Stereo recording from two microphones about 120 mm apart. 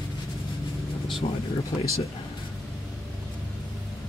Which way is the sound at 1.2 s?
60° left (ahead or behind).